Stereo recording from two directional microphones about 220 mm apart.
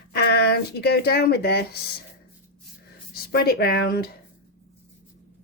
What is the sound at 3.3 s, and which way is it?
Speech, 45° left (ahead or behind).